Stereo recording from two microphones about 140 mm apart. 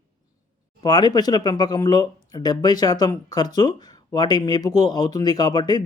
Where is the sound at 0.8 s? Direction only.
30° left (ahead or behind).